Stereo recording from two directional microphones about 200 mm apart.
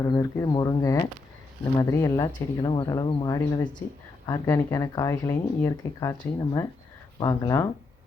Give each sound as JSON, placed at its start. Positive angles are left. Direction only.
{"t": 0.0, "sound": "speech", "side_deg": 15}